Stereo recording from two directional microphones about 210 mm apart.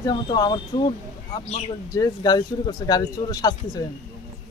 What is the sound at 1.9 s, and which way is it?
Speech, 20° left (ahead or behind).